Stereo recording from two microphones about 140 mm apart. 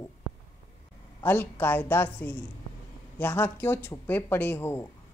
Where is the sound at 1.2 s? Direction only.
15° left (ahead or behind).